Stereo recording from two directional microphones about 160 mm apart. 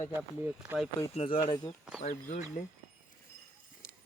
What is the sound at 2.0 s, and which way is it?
Speech, 50° left (ahead or behind).